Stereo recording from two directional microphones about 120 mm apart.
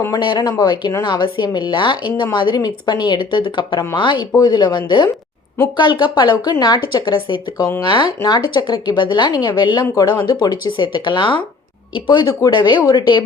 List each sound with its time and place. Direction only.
0.2 s a woman's voice: 40° left (ahead or behind)